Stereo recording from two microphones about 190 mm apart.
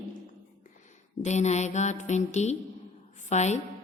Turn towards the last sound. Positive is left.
turn(degrees=35)  # may be behind; listen again after turning